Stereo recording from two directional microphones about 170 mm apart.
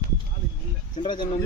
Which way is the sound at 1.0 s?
30° left (ahead or behind).